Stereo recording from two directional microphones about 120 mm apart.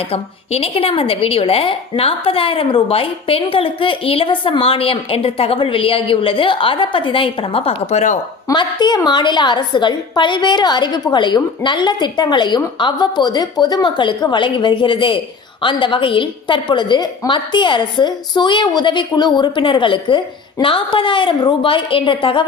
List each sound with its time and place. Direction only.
0.0 s a woman's voice: 55° left (ahead or behind); by 8.2 s 80° left
8.5 s a woman's voice: 40° left (ahead or behind)